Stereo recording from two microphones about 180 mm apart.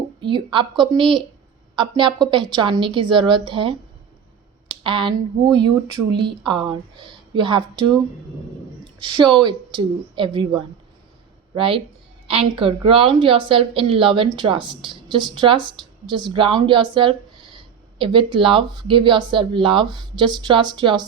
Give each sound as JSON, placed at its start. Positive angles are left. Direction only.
{"t": 0.2, "sound": "a woman's voice", "side_deg": -25}
{"t": 9.2, "sound": "a woman's voice", "side_deg": -25}